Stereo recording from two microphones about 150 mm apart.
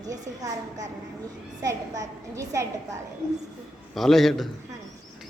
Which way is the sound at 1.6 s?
20° right (ahead or behind).